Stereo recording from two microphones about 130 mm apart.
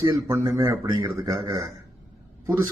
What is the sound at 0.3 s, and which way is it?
Speech, 20° right (ahead or behind).